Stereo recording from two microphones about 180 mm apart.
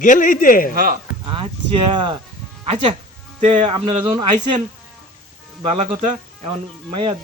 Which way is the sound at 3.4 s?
45° right (ahead or behind).